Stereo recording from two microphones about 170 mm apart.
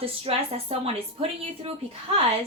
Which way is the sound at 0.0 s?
35° right (ahead or behind).